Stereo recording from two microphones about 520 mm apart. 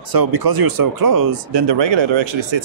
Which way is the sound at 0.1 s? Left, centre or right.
Right.